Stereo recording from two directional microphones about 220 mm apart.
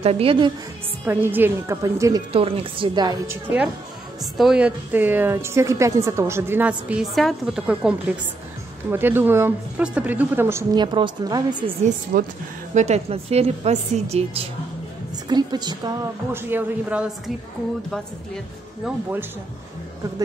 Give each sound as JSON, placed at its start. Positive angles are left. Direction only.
{"t": 0.0, "sound": "a woman's voice", "side_deg": -25}
{"t": 1.0, "sound": "a woman's voice", "side_deg": -10}
{"t": 2.3, "sound": "a woman's voice", "side_deg": -25}
{"t": 8.9, "sound": "a woman's voice", "side_deg": -10}
{"t": 11.8, "sound": "a woman's voice", "side_deg": -40}